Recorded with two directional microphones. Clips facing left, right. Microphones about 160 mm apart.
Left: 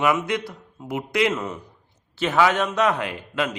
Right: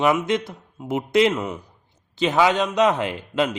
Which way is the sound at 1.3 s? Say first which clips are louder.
Right 2 dB; 15° right (ahead or behind).